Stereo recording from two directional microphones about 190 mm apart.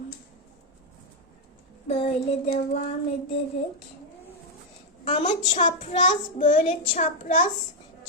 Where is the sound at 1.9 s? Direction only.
35° left (ahead or behind).